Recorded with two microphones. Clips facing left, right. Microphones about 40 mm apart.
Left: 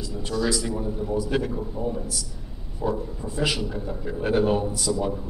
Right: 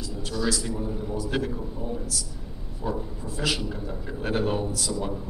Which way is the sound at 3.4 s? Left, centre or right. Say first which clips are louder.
Left 2 dB; centre.